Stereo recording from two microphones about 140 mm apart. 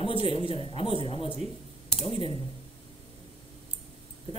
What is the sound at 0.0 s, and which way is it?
Speech, 40° left (ahead or behind).